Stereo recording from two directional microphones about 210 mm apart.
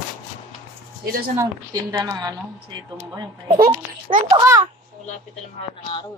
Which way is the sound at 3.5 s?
45° right (ahead or behind).